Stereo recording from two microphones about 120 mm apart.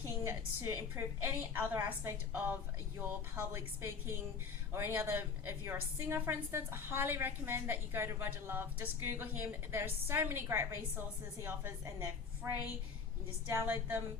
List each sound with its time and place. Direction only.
0.3 s a woman's voice: 20° right (ahead or behind)